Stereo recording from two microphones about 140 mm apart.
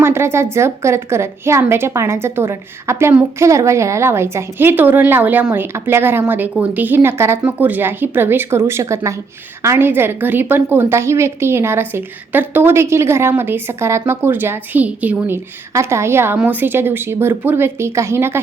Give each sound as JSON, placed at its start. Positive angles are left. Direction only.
{"t": 0.0, "sound": "a woman's voice", "side_deg": -20}